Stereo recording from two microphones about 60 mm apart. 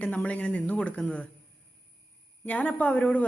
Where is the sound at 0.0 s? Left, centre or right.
Left.